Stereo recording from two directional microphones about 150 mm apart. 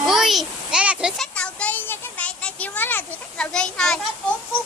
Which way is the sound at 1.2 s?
5° left (ahead or behind).